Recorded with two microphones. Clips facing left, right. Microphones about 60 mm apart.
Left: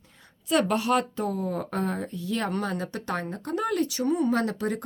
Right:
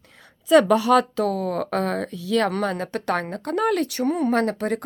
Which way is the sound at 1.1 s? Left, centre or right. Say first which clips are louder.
Right 6 dB; right.